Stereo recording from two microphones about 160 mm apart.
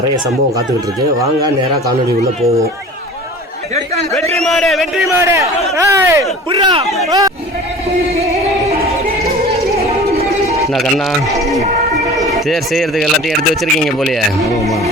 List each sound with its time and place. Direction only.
4.4 s speech: 5° left (ahead or behind)
5.0 s a man's voice: 20° right (ahead or behind)
6.5 s speech: 35° right (ahead or behind)
7.1 s speech: 20° right (ahead or behind)
10.7 s speech: centre (ahead or behind)